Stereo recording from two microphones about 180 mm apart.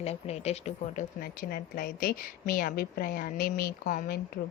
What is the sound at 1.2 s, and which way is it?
A woman's voice, 55° left (ahead or behind).